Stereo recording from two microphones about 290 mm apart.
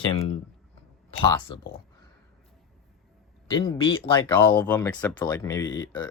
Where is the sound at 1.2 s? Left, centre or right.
Centre.